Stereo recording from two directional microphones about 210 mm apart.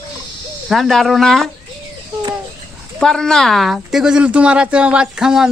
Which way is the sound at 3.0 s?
Centre (ahead or behind).